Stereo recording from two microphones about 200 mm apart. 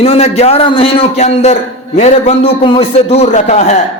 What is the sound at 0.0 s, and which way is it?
A man's voice, 30° left (ahead or behind).